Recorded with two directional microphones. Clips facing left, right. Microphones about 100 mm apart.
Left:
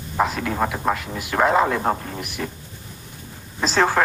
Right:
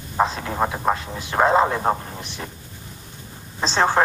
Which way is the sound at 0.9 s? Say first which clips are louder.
Even; 30° right (ahead or behind).